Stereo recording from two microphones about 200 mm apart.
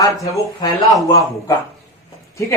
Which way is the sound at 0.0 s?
15° left (ahead or behind).